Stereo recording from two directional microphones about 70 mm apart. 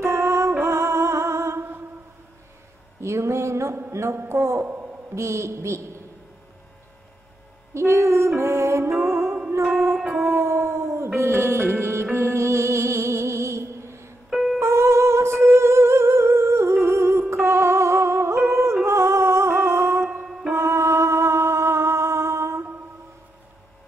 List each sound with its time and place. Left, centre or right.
0.0 s music: right
3.0 s a sound: right
3.9 s a woman's voice: right
7.7 s music: right
9.9 s music: centre
10.2 s a sound: right
11.1 s music: right
14.3 s music: centre
14.6 s music: right
20.2 s music: centre
20.5 s music: right